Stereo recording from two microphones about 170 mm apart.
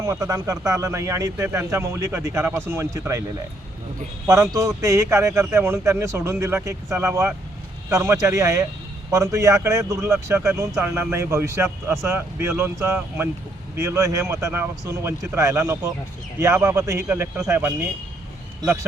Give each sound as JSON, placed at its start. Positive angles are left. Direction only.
{"t": 0.0, "sound": "speech", "side_deg": -20}
{"t": 4.3, "sound": "speech", "side_deg": -20}